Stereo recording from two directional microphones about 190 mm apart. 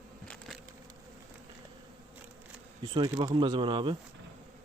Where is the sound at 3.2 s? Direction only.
25° right (ahead or behind).